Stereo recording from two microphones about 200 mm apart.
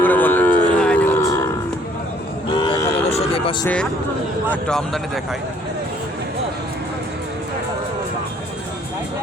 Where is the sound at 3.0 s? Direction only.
30° left (ahead or behind).